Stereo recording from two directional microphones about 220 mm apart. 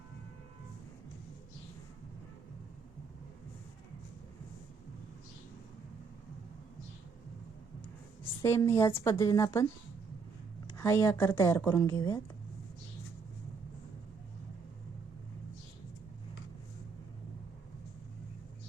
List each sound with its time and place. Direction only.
8.2 s a woman's voice: 15° left (ahead or behind)
10.8 s speech: 10° left (ahead or behind)